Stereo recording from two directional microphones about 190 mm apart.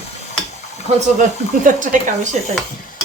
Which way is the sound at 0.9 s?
35° right (ahead or behind).